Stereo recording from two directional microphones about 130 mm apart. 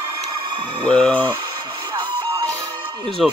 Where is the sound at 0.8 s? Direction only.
10° left (ahead or behind).